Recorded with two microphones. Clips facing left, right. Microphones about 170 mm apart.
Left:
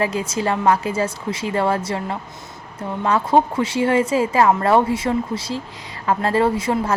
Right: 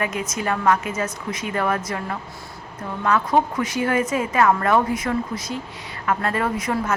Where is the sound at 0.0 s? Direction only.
30° left (ahead or behind).